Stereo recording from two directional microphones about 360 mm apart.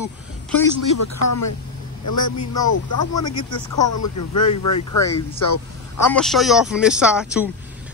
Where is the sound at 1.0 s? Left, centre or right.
Left.